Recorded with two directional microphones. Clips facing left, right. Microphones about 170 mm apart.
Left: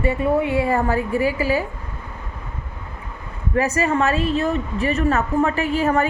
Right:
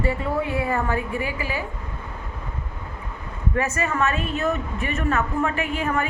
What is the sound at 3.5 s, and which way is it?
A woman's voice, 35° left (ahead or behind).